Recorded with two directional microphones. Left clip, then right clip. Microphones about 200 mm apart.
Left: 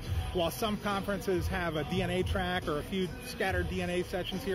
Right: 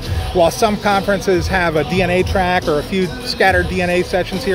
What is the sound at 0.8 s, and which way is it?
Speech, 15° right (ahead or behind).